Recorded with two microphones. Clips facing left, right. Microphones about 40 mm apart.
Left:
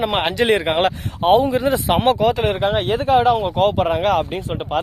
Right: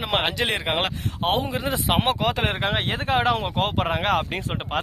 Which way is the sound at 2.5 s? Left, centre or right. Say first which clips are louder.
Left 6 dB; right.